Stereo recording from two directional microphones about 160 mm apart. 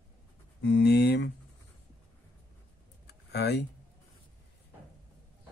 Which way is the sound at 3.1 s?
90° left.